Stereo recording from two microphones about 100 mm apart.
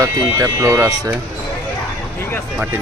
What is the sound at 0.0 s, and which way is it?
Speech, 35° right (ahead or behind).